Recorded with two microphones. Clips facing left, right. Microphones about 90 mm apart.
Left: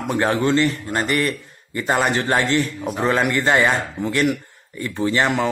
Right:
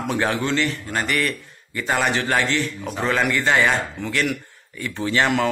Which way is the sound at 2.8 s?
10° left (ahead or behind).